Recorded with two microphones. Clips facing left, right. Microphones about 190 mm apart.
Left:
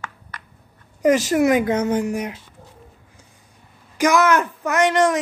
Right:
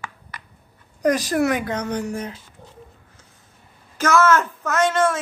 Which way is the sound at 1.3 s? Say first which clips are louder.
Left 4 dB; 20° left (ahead or behind).